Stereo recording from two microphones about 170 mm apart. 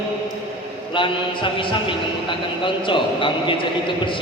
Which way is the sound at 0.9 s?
30° left (ahead or behind).